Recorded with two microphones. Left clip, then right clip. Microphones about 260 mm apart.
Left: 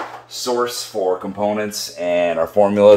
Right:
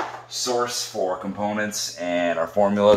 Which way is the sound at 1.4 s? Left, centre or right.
Left.